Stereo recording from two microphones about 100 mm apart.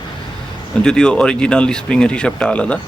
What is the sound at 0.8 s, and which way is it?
Speech, 10° left (ahead or behind).